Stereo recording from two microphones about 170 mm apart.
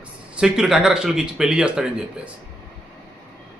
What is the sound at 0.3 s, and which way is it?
Speech, 5° right (ahead or behind).